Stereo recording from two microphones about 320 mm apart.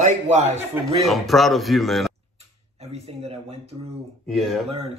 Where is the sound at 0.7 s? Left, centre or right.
Centre.